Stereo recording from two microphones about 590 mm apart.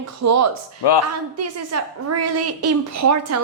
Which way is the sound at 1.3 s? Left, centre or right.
Right.